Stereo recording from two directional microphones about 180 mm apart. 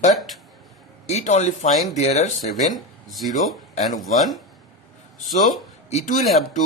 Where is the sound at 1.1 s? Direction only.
40° left (ahead or behind).